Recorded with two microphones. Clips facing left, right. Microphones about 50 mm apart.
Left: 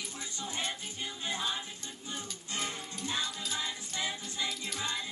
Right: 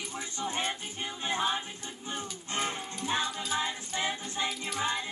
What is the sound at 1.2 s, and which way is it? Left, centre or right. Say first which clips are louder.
Music: right 6 dB; right.